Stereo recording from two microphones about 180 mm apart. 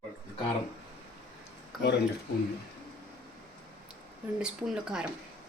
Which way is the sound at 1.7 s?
Centre (ahead or behind).